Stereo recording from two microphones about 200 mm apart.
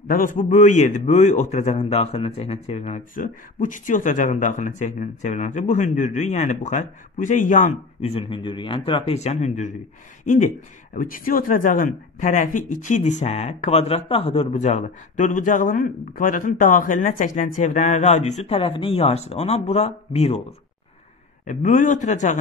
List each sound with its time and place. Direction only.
0.1 s a man's voice: 45° left (ahead or behind)
21.5 s a man's voice: 40° left (ahead or behind)